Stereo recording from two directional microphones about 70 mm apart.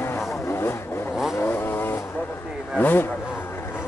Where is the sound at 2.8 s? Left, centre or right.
Left.